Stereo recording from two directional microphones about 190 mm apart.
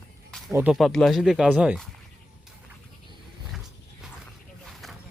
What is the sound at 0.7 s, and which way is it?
Speech, centre (ahead or behind).